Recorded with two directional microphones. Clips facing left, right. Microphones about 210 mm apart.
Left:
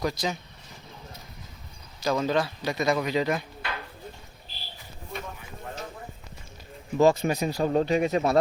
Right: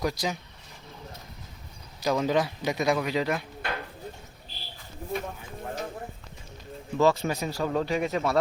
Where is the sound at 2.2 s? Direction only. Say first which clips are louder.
Right 1 dB; 15° right (ahead or behind).